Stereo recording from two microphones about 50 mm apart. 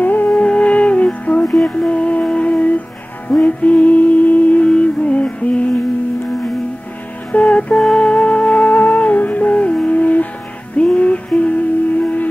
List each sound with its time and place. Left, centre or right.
0.0 s music: left
0.4 s music: left
1.4 s music: centre
1.7 s music: left
7.3 s music: left